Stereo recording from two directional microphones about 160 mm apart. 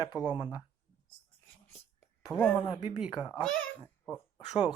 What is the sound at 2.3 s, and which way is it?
A child's voice, 5° right (ahead or behind).